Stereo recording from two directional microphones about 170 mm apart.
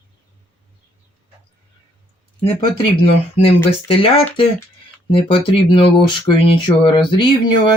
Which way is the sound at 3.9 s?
35° left (ahead or behind).